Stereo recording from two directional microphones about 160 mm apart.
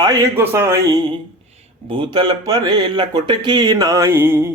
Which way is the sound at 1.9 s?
30° right (ahead or behind).